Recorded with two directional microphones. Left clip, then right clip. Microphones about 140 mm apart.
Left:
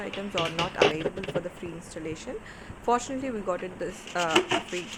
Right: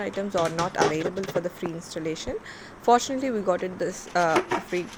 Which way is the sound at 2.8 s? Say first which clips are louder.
Right 6 dB; 35° right (ahead or behind).